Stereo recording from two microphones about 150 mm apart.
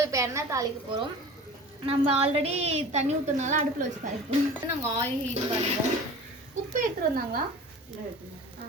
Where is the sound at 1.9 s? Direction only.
40° right (ahead or behind).